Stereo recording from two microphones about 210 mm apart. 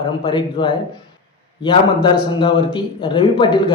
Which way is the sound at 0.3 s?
25° left (ahead or behind).